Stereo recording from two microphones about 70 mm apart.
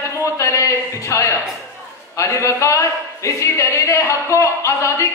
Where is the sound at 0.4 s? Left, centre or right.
Left.